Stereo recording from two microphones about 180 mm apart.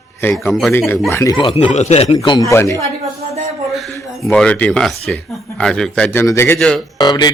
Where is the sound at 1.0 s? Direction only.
15° left (ahead or behind).